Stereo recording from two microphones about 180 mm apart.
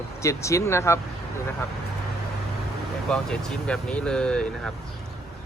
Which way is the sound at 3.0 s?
5° left (ahead or behind).